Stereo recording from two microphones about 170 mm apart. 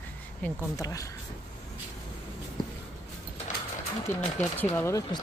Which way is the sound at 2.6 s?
25° left (ahead or behind).